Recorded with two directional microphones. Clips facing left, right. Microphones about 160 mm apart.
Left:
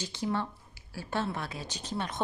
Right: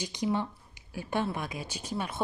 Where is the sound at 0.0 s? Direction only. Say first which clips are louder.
Right 2 dB; 15° right (ahead or behind).